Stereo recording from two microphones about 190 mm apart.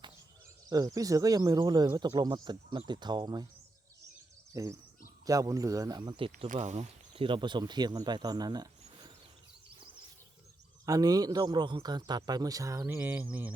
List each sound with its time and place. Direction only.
0.7 s speech: 20° right (ahead or behind)
4.5 s speech: 15° right (ahead or behind)
6.5 s speech: 40° right (ahead or behind); by 9.1 s 20° right (ahead or behind)
10.8 s speech: 20° right (ahead or behind)